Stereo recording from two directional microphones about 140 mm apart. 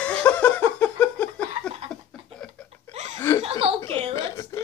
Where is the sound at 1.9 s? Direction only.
25° right (ahead or behind).